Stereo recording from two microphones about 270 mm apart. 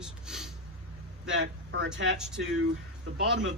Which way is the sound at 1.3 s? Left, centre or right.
Right.